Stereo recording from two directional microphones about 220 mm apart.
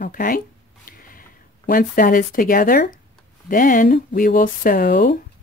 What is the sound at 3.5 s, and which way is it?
Speech, 35° left (ahead or behind).